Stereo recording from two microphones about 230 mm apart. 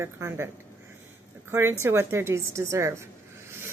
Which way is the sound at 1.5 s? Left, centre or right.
Centre.